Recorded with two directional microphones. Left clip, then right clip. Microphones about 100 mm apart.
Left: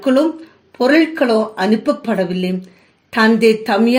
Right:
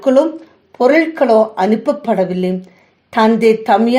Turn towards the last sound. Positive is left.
turn(degrees=-20)  # may be behind; listen again after turning